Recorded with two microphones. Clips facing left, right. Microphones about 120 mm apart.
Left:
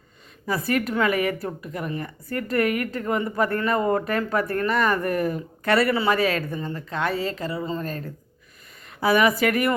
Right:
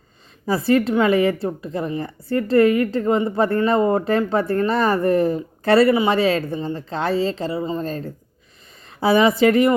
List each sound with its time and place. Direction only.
0.4 s a woman's voice: 30° right (ahead or behind)